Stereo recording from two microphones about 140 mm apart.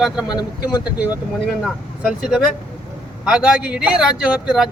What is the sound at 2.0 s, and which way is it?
A man's voice, 5° right (ahead or behind).